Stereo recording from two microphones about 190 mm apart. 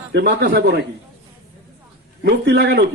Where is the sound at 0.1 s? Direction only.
65° right (ahead or behind).